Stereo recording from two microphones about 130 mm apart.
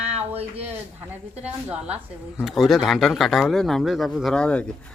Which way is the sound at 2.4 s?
Centre (ahead or behind).